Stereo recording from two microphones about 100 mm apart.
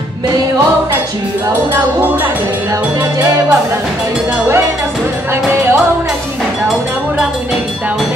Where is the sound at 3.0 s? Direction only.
35° right (ahead or behind).